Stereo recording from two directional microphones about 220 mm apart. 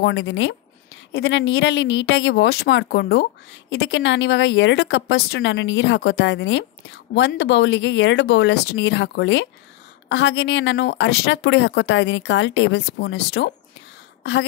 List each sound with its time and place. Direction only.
0.0 s a woman's voice: 55° left (ahead or behind)